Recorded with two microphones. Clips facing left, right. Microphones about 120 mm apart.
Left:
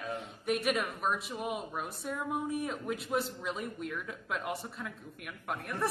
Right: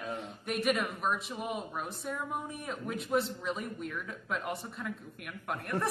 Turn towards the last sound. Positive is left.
turn(degrees=0)  # may be behind; listen again after turning